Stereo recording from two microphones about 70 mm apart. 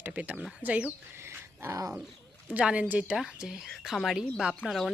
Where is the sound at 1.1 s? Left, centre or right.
Right.